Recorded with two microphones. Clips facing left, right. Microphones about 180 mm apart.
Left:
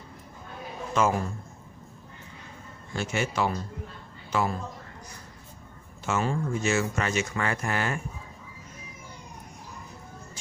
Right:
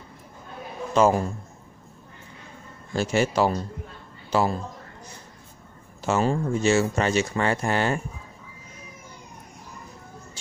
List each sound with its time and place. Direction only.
0.9 s speech: 35° right (ahead or behind)
2.9 s speech: 35° right (ahead or behind)
6.0 s speech: 35° right (ahead or behind)